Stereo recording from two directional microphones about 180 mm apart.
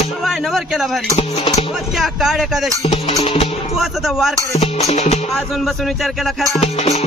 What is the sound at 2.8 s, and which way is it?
Music, 30° left (ahead or behind).